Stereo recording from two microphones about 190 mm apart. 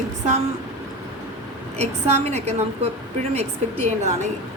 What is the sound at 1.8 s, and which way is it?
A woman's voice, 35° right (ahead or behind).